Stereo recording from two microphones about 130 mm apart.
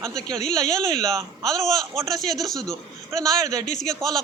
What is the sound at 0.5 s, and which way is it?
Speech, 25° right (ahead or behind).